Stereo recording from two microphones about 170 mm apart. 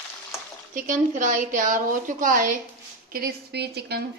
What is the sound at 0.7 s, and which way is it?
A woman's voice, 50° right (ahead or behind).